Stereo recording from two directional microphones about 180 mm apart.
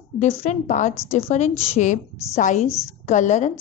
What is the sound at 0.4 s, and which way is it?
A woman's voice, 40° left (ahead or behind).